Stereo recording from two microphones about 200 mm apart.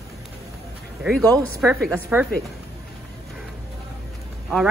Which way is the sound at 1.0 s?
Centre (ahead or behind).